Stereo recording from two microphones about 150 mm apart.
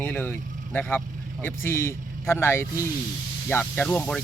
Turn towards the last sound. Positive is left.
turn(degrees=10)  # may be behind; listen again after turning